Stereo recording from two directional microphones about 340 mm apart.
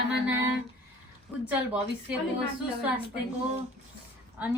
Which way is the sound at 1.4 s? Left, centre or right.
Centre.